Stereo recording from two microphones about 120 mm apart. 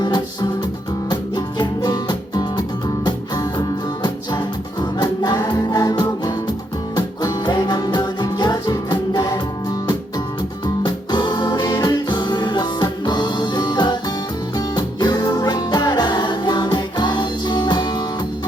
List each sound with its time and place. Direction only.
1.1 s music: 35° left (ahead or behind)
10.8 s music: 35° left (ahead or behind)